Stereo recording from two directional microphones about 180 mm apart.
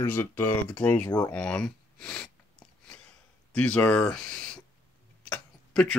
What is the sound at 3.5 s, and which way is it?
Speech, 5° left (ahead or behind).